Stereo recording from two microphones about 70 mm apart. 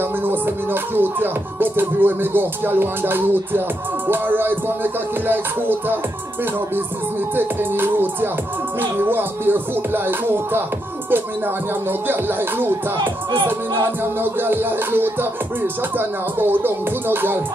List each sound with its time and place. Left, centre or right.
0.2 s music: right
7.3 s music: right
12.1 s music: right
14.2 s music: right